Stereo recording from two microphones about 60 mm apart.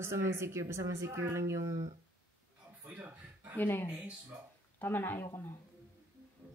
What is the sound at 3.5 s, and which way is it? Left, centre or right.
Speech, left.